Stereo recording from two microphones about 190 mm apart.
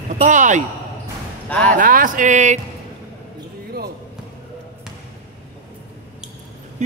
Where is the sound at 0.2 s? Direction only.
40° right (ahead or behind).